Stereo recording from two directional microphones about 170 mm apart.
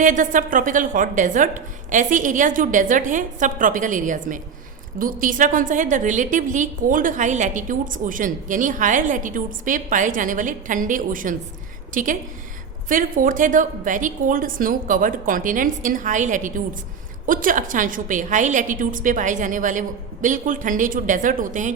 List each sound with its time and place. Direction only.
0.0 s a woman's voice: 50° right (ahead or behind)